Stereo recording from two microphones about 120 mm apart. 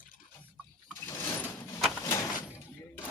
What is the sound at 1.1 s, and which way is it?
Vehicle, 20° left (ahead or behind).